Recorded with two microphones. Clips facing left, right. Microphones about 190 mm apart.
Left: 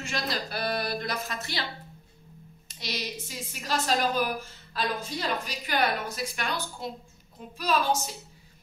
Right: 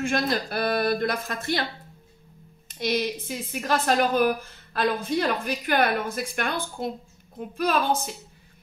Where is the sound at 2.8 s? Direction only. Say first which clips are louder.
Right 10 dB; 55° right (ahead or behind).